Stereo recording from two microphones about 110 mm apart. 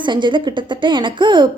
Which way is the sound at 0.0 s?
45° right (ahead or behind).